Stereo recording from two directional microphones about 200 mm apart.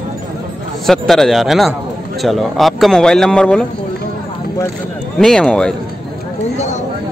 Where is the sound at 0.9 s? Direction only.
Centre (ahead or behind).